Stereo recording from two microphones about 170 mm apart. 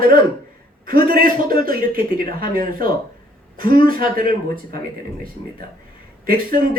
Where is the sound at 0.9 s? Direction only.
55° right (ahead or behind).